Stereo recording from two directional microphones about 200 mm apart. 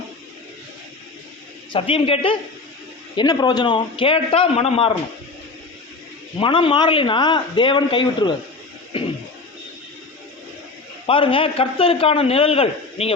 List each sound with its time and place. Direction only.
1.7 s a man's voice: 25° left (ahead or behind)
6.4 s a man's voice: 25° left (ahead or behind)
11.0 s a man's voice: 25° left (ahead or behind)